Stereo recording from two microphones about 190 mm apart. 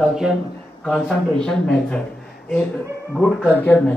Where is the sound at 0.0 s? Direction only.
5° right (ahead or behind).